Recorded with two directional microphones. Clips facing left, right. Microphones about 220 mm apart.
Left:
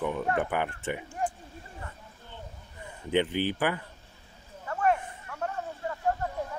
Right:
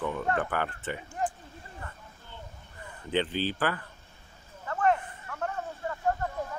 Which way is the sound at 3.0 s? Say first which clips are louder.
Left 2 dB; 15° left (ahead or behind).